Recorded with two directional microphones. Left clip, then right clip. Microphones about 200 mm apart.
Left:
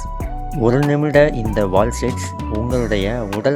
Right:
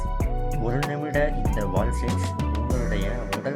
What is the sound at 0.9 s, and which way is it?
Speech, 55° left (ahead or behind).